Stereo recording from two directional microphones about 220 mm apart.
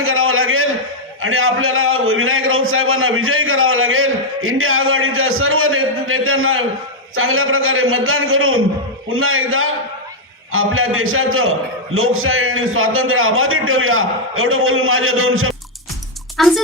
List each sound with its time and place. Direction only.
0.0 s a sound: 70° right (ahead or behind)
1.2 s a man's voice: 70° right (ahead or behind)
16.4 s speech: centre (ahead or behind)